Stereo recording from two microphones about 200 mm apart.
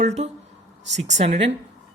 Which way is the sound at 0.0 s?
35° right (ahead or behind).